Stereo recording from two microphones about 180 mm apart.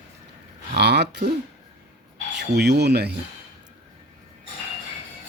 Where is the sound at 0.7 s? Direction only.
70° right (ahead or behind).